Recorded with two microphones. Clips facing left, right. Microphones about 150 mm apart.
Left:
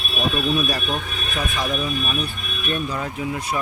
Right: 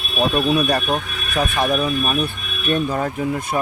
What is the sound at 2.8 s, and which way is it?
Speech, 50° right (ahead or behind).